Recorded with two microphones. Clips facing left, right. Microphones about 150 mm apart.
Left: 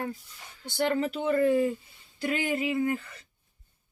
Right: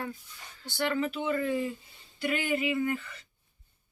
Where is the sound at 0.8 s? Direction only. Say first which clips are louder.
Left 3 dB; 40° left (ahead or behind).